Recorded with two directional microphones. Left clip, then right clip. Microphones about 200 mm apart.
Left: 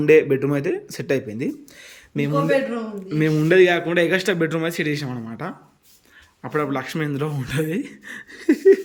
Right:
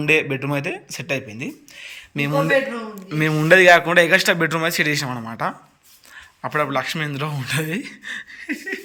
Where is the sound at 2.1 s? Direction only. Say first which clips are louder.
Right 1 dB; 15° left (ahead or behind).